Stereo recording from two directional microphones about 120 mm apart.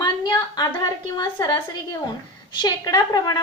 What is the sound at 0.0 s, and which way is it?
A woman's voice, 35° left (ahead or behind).